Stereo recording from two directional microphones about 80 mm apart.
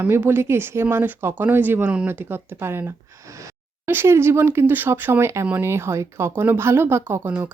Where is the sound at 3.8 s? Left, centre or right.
Right.